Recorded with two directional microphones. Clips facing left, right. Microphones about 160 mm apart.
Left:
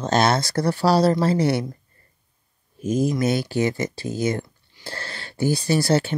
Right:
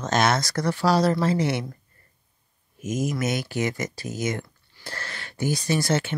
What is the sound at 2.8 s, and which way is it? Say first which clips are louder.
Speech: left 5 dB; 30° left (ahead or behind).